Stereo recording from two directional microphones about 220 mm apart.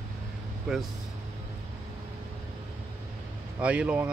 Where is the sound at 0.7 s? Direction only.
5° right (ahead or behind).